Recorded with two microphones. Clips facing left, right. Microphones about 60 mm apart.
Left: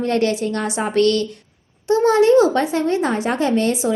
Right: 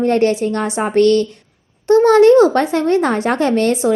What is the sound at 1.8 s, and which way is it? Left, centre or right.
Speech, right.